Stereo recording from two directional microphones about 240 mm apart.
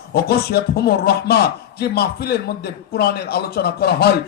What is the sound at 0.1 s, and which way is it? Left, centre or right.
A man's voice, left.